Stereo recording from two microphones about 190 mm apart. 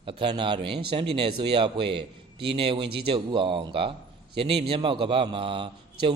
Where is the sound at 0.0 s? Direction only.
25° right (ahead or behind).